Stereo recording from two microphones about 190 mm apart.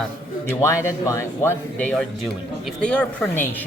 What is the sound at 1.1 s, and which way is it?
Speech, 15° left (ahead or behind).